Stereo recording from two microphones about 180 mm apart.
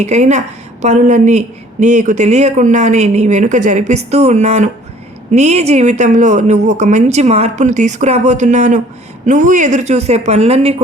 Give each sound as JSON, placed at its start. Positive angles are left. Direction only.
{"t": 0.0, "sound": "a woman's voice", "side_deg": -40}